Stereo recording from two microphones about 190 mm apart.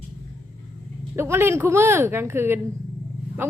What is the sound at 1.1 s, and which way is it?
A woman's voice, 15° right (ahead or behind).